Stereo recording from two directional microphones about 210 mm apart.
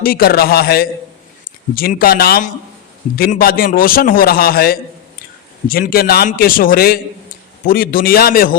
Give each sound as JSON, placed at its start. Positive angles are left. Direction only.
{"t": 0.0, "sound": "a man's voice", "side_deg": 45}